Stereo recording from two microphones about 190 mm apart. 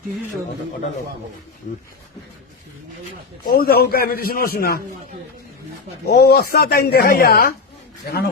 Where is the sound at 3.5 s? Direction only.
50° left (ahead or behind).